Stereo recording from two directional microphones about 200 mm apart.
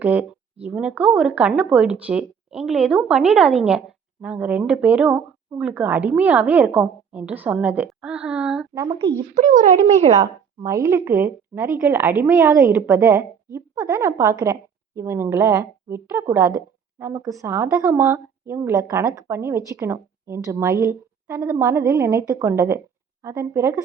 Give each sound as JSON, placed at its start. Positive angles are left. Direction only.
{"t": 0.0, "sound": "a woman's voice", "side_deg": -10}
{"t": 8.7, "sound": "a woman's voice", "side_deg": -20}
{"t": 9.3, "sound": "speech", "side_deg": -40}
{"t": 10.6, "sound": "a woman's voice", "side_deg": -15}